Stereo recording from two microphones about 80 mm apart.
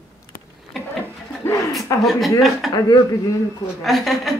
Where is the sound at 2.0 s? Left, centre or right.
Centre.